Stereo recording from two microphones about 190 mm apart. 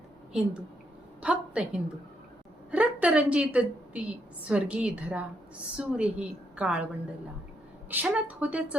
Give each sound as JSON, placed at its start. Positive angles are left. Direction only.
{"t": 1.2, "sound": "a woman's voice", "side_deg": -5}
{"t": 7.9, "sound": "a woman's voice", "side_deg": -10}